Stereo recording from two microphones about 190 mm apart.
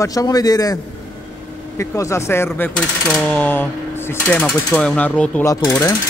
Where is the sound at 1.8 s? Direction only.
15° left (ahead or behind).